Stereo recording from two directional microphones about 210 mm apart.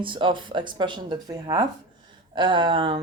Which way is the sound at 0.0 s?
25° right (ahead or behind).